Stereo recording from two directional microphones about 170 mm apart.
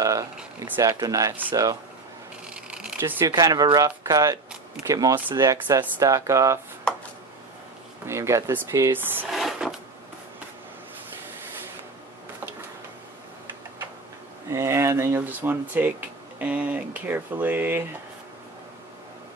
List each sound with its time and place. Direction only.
0.0 s a sound: 20° right (ahead or behind)
0.8 s speech: 20° right (ahead or behind)
2.5 s speech: 5° right (ahead or behind)
8.1 s speech: 15° right (ahead or behind)
9.3 s drawer open or close: centre (ahead or behind)
14.5 s speech: 15° right (ahead or behind)